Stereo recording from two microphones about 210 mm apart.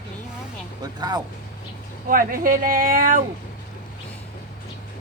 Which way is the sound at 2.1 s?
40° right (ahead or behind).